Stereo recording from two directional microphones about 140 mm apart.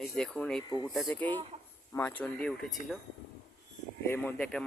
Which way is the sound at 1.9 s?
15° left (ahead or behind).